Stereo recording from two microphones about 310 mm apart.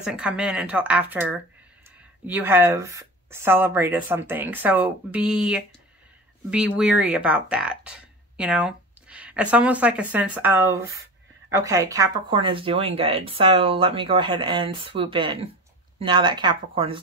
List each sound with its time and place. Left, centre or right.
0.0 s speech: centre